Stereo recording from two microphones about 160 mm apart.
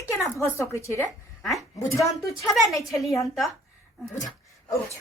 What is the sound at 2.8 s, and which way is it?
Speech, centre (ahead or behind).